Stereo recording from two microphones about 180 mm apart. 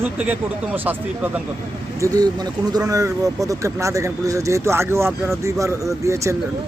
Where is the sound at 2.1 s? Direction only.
20° right (ahead or behind).